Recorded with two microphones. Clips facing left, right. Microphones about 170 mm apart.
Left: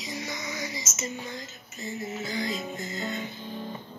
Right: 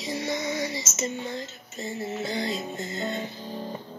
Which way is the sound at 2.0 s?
30° right (ahead or behind).